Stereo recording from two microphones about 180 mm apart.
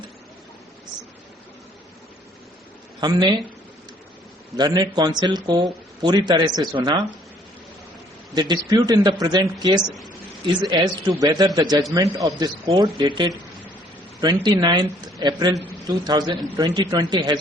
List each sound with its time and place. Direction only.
3.0 s speech: 25° right (ahead or behind)
4.5 s speech: 20° right (ahead or behind)
8.4 s speech: 25° right (ahead or behind)
14.3 s speech: 25° right (ahead or behind)